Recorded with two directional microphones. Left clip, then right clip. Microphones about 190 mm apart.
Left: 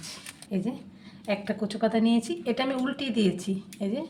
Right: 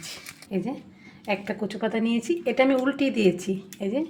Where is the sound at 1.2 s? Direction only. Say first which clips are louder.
Right 2 dB; 35° right (ahead or behind).